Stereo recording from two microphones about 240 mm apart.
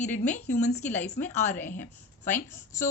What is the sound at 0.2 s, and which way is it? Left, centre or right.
Speech, left.